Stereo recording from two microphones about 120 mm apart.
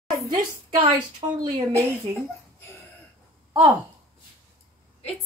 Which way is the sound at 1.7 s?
20° right (ahead or behind).